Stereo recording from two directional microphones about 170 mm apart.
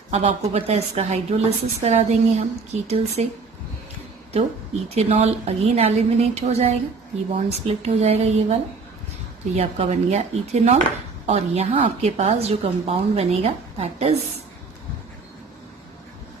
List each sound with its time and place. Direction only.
0.1 s a woman's voice: 35° right (ahead or behind)
4.9 s a woman's voice: 40° right (ahead or behind)
9.6 s a woman's voice: 35° right (ahead or behind)